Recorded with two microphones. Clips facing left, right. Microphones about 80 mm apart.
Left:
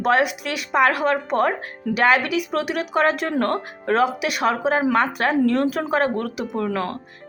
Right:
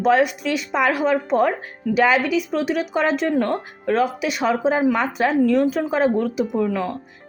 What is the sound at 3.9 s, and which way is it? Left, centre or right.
Speech, left.